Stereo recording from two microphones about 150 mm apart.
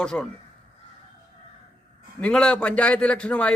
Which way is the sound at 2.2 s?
5° left (ahead or behind).